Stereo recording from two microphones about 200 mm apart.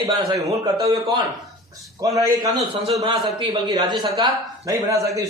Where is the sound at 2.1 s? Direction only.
20° right (ahead or behind).